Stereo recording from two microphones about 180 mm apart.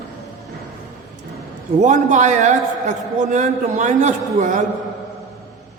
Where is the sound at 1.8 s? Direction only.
45° right (ahead or behind).